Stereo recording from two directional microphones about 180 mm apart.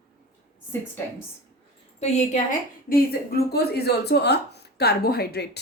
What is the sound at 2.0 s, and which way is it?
Speech, 40° left (ahead or behind).